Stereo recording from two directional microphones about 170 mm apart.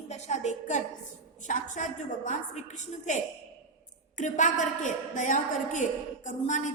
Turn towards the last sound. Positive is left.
turn(degrees=45)  # may be behind; listen again after turning